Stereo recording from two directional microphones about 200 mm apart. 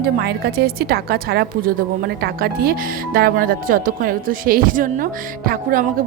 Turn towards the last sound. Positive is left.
turn(degrees=-45)  # may be behind; listen again after turning